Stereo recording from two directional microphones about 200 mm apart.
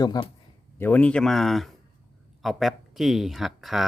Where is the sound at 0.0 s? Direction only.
20° left (ahead or behind).